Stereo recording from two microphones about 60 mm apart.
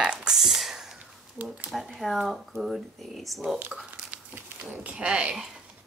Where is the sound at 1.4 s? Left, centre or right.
Right.